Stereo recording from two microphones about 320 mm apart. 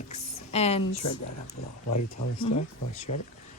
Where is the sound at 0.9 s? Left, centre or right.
Left.